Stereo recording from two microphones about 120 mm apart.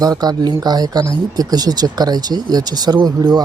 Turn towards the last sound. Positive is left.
turn(degrees=-35)  # may be behind; listen again after turning